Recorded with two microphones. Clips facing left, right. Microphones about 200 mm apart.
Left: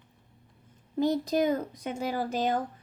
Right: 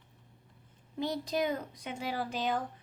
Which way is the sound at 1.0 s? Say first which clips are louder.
Left 7 dB; 45° left (ahead or behind).